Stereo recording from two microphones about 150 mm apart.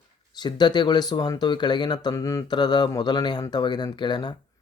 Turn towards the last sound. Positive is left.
turn(degrees=30)  # may be behind; listen again after turning